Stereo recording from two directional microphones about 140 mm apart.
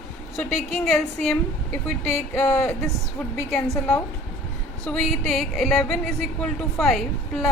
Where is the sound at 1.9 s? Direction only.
15° left (ahead or behind).